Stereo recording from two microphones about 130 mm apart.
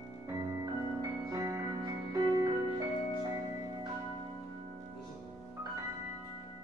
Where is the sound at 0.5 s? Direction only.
25° right (ahead or behind).